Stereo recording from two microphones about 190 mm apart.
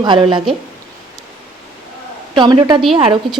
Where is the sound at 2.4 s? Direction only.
20° right (ahead or behind).